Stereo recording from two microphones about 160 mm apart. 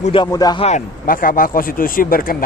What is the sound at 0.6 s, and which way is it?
Speech, 55° left (ahead or behind).